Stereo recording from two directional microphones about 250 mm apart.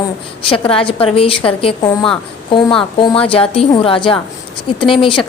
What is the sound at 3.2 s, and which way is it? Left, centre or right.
A woman's voice, left.